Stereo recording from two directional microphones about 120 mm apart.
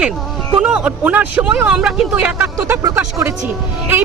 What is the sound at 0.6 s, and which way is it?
Speech, 10° right (ahead or behind).